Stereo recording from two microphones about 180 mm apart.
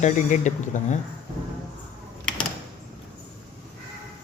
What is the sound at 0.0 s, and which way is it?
Speech, 45° left (ahead or behind).